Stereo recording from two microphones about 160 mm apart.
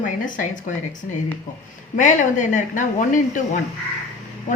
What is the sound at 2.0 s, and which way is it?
Speech, 50° left (ahead or behind).